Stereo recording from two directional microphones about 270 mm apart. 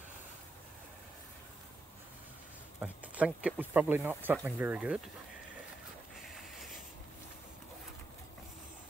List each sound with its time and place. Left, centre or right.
2.8 s speech: centre